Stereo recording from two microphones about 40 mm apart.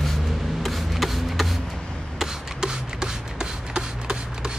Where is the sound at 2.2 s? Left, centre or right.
Centre.